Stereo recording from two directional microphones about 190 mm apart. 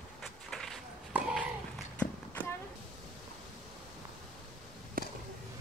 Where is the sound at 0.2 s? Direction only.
Centre (ahead or behind).